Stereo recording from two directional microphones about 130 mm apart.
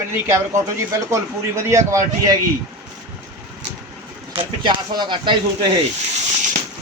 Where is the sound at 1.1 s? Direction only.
20° right (ahead or behind).